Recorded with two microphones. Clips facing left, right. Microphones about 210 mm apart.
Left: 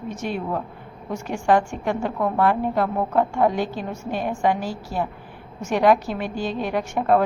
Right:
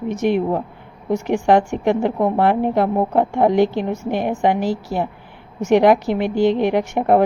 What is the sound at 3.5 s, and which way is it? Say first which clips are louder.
A woman's voice: right 9 dB; 75° right (ahead or behind).